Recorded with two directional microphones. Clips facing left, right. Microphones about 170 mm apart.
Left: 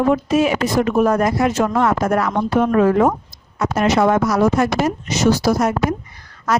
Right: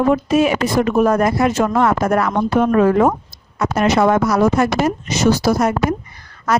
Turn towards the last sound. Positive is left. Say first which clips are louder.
# right 1 dB
turn(degrees=-60)  # may be behind; listen again after turning